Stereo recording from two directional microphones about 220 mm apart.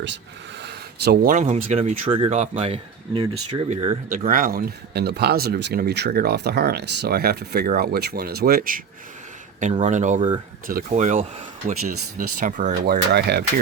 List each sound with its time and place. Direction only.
0.6 s speech: 50° right (ahead or behind)
9.8 s speech: 35° right (ahead or behind)
10.2 s speech: 25° right (ahead or behind)
10.7 s speech: 40° right (ahead or behind)